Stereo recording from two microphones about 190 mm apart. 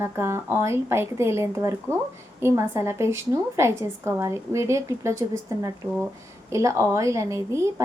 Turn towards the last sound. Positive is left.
turn(degrees=-15)  # may be behind; listen again after turning